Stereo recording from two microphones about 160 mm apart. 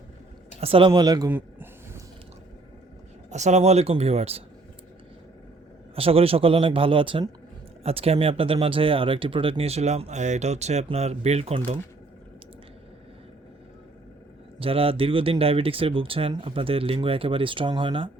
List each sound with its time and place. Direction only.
0.6 s speech: 35° right (ahead or behind)
1.3 s a sound: 10° right (ahead or behind)
3.2 s speech: 45° right (ahead or behind)
6.0 s speech: 35° right (ahead or behind)
14.6 s speech: 35° right (ahead or behind)